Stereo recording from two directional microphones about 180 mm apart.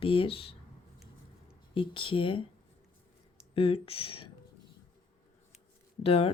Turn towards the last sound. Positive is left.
turn(degrees=35)  # may be behind; listen again after turning